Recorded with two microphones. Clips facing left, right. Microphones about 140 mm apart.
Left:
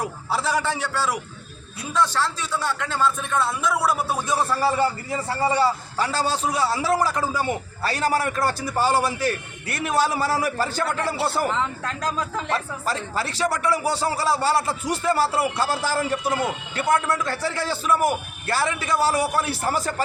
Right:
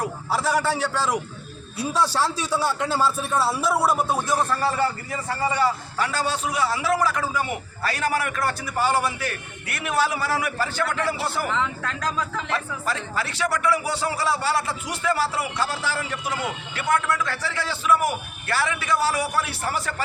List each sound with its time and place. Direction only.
0.3 s a man's voice: centre (ahead or behind)
4.3 s a man's voice: 5° left (ahead or behind)
5.1 s a man's voice: 30° left (ahead or behind)